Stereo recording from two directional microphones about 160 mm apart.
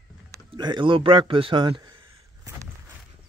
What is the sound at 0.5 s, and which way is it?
Speech, 30° right (ahead or behind).